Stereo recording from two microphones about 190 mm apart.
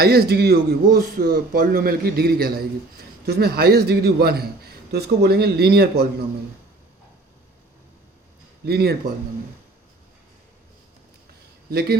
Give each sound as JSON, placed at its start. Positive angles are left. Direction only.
{"t": 0.0, "sound": "a man's voice", "side_deg": -55}
{"t": 8.6, "sound": "a man's voice", "side_deg": -55}
{"t": 11.7, "sound": "a man's voice", "side_deg": -55}